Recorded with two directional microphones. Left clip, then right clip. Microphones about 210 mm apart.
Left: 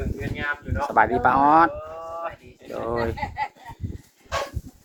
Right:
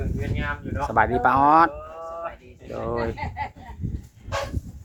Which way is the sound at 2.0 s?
50° left (ahead or behind).